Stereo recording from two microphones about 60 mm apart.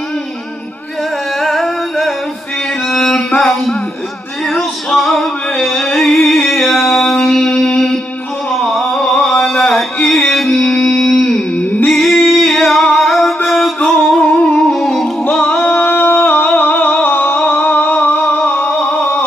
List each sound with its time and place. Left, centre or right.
1.4 s music: centre
4.9 s music: centre
8.5 s a sound: centre
10.0 s music: centre
10.7 s a sound: centre
11.9 s singing: centre
12.9 s music: centre
14.2 s music: centre
14.8 s music: centre
15.2 s singing: left
18.5 s a sound: left